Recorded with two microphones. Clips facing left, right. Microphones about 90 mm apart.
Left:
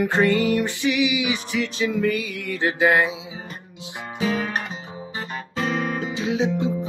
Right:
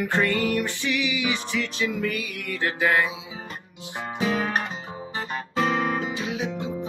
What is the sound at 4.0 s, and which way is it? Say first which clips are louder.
Music: left 1 dB; 20° right (ahead or behind).